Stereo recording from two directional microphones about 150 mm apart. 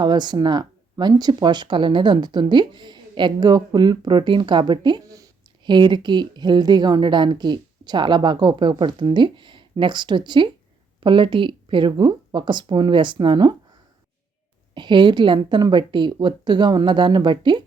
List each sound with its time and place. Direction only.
0.0 s speech: 30° right (ahead or behind)
14.8 s speech: 30° right (ahead or behind)